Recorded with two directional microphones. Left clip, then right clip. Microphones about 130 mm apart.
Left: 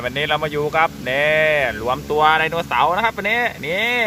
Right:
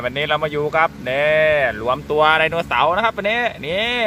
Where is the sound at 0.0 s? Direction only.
25° right (ahead or behind).